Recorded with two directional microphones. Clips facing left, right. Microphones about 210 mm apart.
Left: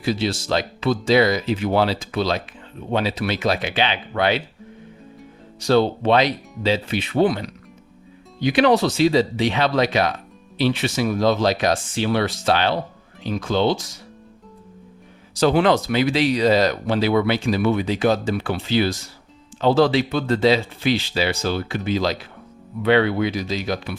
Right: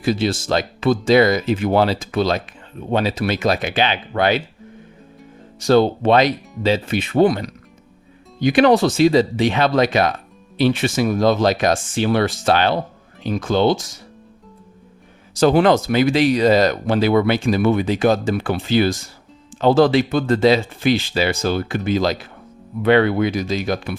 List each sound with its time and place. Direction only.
0.0 s speech: 50° right (ahead or behind)
5.5 s speech: 45° right (ahead or behind)
15.4 s speech: 45° right (ahead or behind)